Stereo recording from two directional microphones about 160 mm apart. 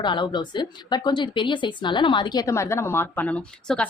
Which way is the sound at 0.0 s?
30° left (ahead or behind).